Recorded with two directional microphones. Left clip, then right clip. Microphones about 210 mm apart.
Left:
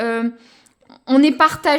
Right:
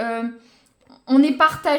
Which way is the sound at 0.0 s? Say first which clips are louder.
Left 4 dB; 40° left (ahead or behind).